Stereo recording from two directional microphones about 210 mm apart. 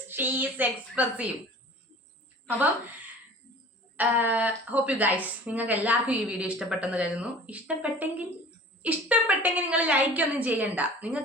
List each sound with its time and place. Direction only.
0.1 s a woman's voice: 10° right (ahead or behind)
3.9 s a woman's voice: 10° right (ahead or behind)